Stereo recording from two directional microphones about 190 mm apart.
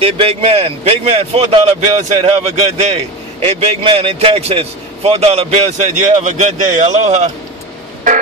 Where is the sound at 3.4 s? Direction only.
35° right (ahead or behind).